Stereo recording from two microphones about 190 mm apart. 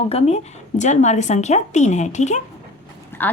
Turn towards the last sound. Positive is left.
turn(degrees=10)  # may be behind; listen again after turning